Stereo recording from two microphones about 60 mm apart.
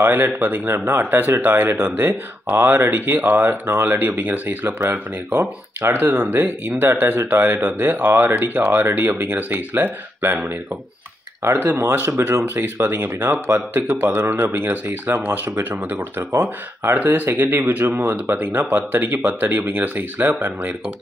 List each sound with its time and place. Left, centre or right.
0.0 s speech: right
1.8 s speech: right
5.9 s speech: right
6.3 s speech: right